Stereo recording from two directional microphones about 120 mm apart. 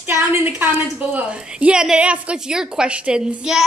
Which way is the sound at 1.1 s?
10° right (ahead or behind).